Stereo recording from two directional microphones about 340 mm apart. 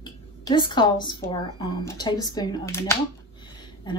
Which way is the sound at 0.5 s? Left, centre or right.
Centre.